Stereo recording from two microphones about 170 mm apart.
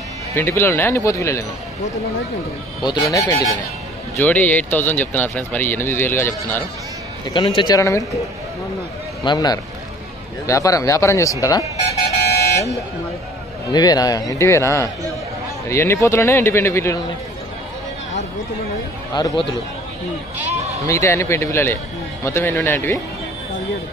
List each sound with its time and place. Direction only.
0.4 s speech: 15° left (ahead or behind)
2.8 s a man's voice: 25° left (ahead or behind)
4.2 s speech: 10° left (ahead or behind)
7.2 s a man's voice: 25° left (ahead or behind)
9.2 s a man's voice: 25° left (ahead or behind)
13.7 s a man's voice: 25° left (ahead or behind)
19.1 s a man's voice: 30° left (ahead or behind)
20.4 s a sound: 40° right (ahead or behind)
20.8 s speech: 15° left (ahead or behind)